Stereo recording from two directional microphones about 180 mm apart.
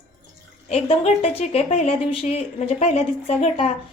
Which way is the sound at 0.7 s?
35° left (ahead or behind).